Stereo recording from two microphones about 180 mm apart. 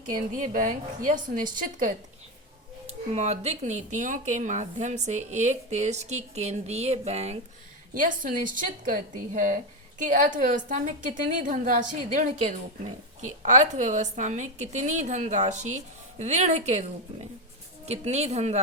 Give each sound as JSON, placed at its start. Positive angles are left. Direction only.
{"t": 0.1, "sound": "a woman's voice", "side_deg": -50}
{"t": 2.8, "sound": "speech", "side_deg": -35}
{"t": 7.9, "sound": "a woman's voice", "side_deg": -50}
{"t": 17.8, "sound": "speech", "side_deg": -35}